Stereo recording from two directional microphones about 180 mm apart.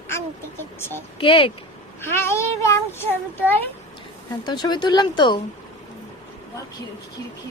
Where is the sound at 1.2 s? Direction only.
30° left (ahead or behind).